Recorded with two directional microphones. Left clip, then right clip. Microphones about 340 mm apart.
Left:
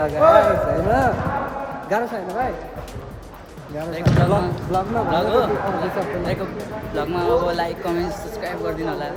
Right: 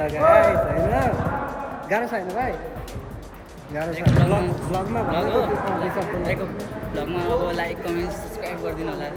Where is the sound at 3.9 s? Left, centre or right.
Centre.